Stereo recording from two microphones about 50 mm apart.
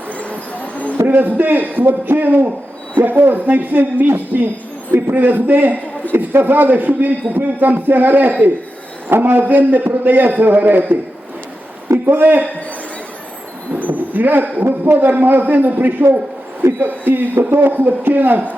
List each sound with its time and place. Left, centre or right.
0.1 s a sound: left
1.0 s a man's voice: right
12.1 s a man's voice: right
13.7 s a man's voice: right
16.6 s speech: right
17.1 s a man's voice: right